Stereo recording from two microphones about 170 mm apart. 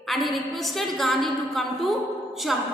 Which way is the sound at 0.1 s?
Centre (ahead or behind).